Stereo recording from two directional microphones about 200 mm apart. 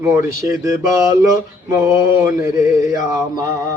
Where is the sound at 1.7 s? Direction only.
15° right (ahead or behind).